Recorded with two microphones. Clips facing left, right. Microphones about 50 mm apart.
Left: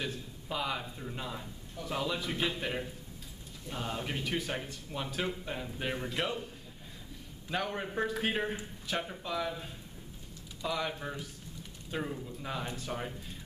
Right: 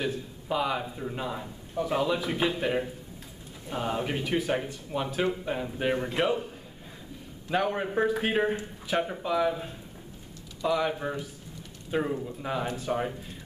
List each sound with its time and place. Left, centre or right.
0.0 s speech: centre
7.4 s speech: centre